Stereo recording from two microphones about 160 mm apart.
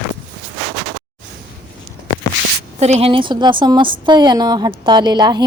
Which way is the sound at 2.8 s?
40° right (ahead or behind).